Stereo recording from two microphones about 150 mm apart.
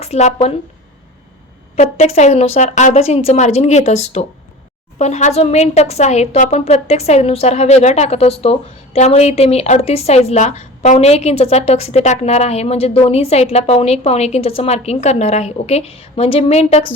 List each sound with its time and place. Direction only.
0.0 s speech: 50° left (ahead or behind)
1.7 s a woman's voice: 45° left (ahead or behind)